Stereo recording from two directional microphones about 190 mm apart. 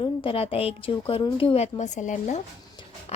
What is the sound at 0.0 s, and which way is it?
A woman's voice, 30° left (ahead or behind).